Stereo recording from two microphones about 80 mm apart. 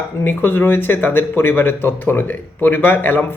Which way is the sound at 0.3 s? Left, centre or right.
Left.